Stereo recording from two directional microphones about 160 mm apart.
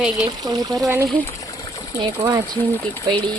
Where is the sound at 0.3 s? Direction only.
25° right (ahead or behind).